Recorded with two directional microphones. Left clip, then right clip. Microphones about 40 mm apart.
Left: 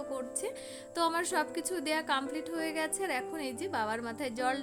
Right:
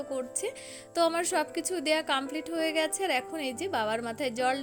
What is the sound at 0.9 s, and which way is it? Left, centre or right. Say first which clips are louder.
A woman's voice: right 4 dB; right.